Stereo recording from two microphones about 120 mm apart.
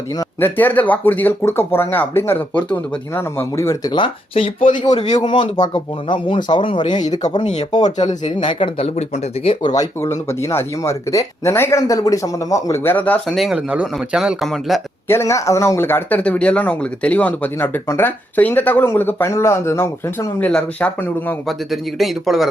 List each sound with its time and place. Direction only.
0.3 s speech: 15° left (ahead or behind)
3.9 s speech: 45° left (ahead or behind)
7.4 s speech: 70° left (ahead or behind)
8.4 s speech: 50° left (ahead or behind)
9.6 s speech: 30° left (ahead or behind); by 13.1 s 15° left (ahead or behind)
13.2 s speech: centre (ahead or behind)
15.0 s speech: 20° left (ahead or behind)
21.4 s speech: centre (ahead or behind)